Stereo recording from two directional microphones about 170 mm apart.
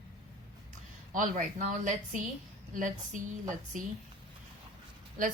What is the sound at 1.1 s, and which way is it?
Speech, 50° right (ahead or behind).